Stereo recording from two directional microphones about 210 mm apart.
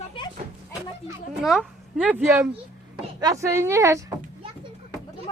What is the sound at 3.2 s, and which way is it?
Speech, 15° right (ahead or behind).